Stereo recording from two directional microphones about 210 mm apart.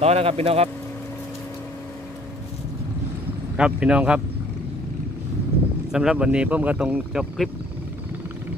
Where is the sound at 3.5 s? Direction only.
5° right (ahead or behind).